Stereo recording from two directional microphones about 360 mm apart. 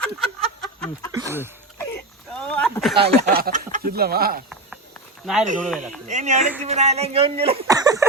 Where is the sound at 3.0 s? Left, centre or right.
Right.